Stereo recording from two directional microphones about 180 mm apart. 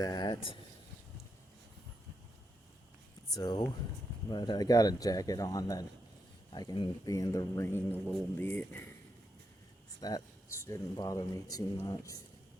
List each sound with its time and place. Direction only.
0.0 s speech: 20° left (ahead or behind)
3.3 s speech: 20° left (ahead or behind)
10.0 s speech: 20° left (ahead or behind)